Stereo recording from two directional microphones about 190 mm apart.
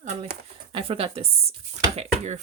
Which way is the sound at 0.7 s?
30° right (ahead or behind).